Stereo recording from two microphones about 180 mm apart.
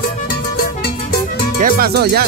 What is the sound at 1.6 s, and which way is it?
Speech, 60° right (ahead or behind).